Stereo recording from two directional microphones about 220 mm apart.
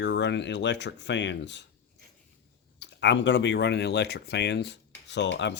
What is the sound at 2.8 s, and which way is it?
Speech, 55° left (ahead or behind).